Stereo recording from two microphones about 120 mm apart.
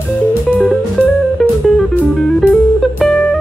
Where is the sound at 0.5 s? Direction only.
5° left (ahead or behind).